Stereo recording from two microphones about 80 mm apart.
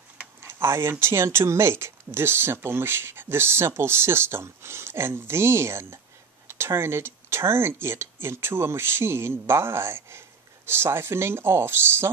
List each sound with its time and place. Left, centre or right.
0.4 s speech: right